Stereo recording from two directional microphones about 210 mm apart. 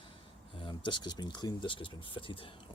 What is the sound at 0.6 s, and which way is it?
Speech, 25° left (ahead or behind).